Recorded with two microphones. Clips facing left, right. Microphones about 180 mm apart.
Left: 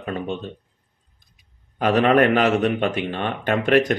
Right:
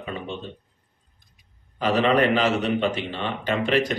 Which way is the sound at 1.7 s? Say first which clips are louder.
Left 4 dB; 55° left (ahead or behind).